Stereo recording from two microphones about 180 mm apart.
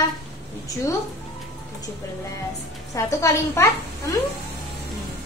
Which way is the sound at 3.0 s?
15° left (ahead or behind).